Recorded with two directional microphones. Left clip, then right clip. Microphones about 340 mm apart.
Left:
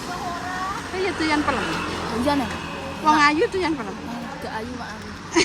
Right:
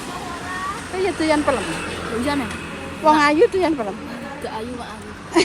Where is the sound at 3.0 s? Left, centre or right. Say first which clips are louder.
Right 3 dB; centre.